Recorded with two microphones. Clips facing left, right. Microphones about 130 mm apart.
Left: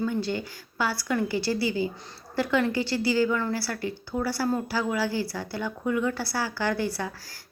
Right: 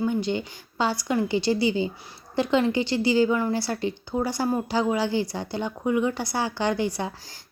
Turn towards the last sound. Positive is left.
turn(degrees=-20)  # may be behind; listen again after turning